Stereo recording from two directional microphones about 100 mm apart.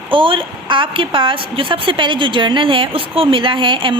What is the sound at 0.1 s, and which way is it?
A woman's voice, 60° right (ahead or behind).